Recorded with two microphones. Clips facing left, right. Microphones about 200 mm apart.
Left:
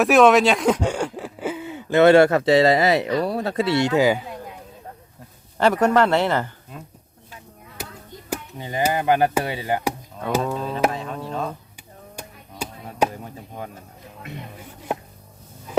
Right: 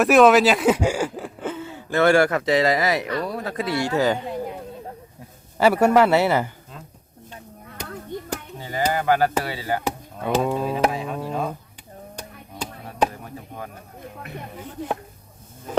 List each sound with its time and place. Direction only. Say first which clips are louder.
0.0 s speech: even; centre (ahead or behind); by 3.1 s 25° left (ahead or behind)
3.2 s music: left 4 dB; 30° left (ahead or behind); by 4.2 s 15° left (ahead or behind)
5.5 s speech: right 1 dB; 10° right (ahead or behind)
8.5 s a sound: left 1 dB; 20° left (ahead or behind)
8.9 s music: left 1 dB; 20° left (ahead or behind)
10.4 s speech: right 1 dB; 10° right (ahead or behind)
12.1 s chop: right 1 dB; 10° left (ahead or behind)